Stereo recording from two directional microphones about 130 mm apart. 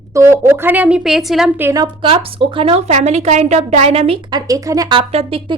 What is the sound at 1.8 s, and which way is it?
A woman's voice, 40° right (ahead or behind).